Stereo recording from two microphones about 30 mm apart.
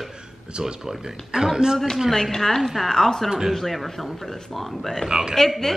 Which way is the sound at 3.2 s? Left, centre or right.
Centre.